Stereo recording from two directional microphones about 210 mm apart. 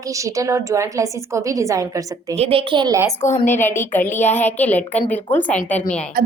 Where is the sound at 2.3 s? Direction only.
30° right (ahead or behind).